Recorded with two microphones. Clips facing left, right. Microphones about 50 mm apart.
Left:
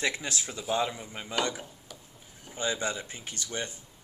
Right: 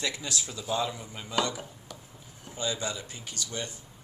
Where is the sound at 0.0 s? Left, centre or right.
Left.